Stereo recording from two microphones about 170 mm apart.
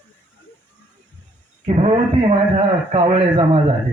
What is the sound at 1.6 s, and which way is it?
A man's voice, 40° right (ahead or behind).